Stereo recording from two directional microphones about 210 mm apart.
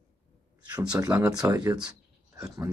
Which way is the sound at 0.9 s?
5° right (ahead or behind).